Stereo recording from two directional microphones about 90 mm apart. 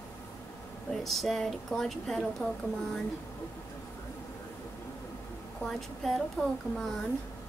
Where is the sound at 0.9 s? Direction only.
Centre (ahead or behind).